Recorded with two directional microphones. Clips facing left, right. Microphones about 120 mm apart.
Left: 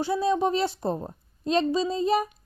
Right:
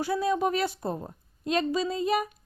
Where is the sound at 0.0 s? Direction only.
25° left (ahead or behind).